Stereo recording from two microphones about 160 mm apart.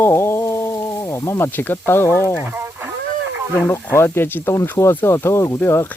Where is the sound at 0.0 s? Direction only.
15° left (ahead or behind).